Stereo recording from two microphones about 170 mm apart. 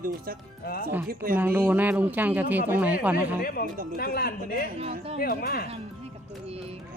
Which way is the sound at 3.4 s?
65° left (ahead or behind).